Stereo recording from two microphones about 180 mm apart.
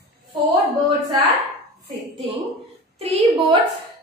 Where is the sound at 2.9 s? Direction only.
35° right (ahead or behind).